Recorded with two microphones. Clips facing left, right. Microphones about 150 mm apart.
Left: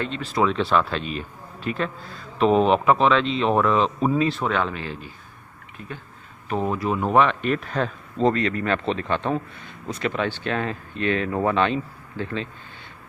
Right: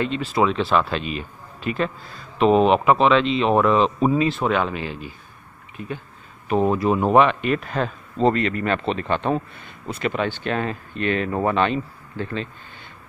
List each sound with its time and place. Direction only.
0.3 s speech: 10° right (ahead or behind)
1.0 s a man's voice: 85° right
2.3 s speech: 10° right (ahead or behind)
6.5 s speech: 25° right (ahead or behind)
7.2 s speech: 5° right (ahead or behind)